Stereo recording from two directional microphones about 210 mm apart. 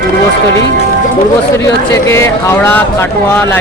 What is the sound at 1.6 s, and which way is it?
Speech, 15° left (ahead or behind).